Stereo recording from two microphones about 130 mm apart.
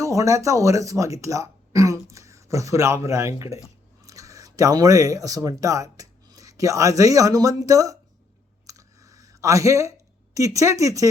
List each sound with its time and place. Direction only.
0.0 s speech: 25° right (ahead or behind)
8.6 s computer keyboard: 25° right (ahead or behind)
10.3 s speech: 25° right (ahead or behind)